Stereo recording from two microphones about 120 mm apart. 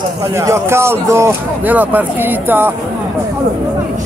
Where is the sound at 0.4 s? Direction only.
25° right (ahead or behind).